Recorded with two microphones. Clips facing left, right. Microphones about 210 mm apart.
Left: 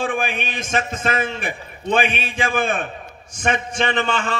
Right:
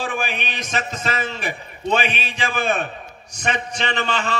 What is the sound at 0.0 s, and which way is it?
A man's voice, 55° left (ahead or behind).